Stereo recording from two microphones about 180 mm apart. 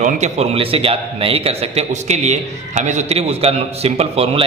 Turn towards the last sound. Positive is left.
turn(degrees=-30)  # may be behind; listen again after turning